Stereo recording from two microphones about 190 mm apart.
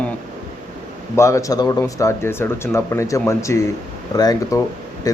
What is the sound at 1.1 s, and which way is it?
Speech, 15° left (ahead or behind).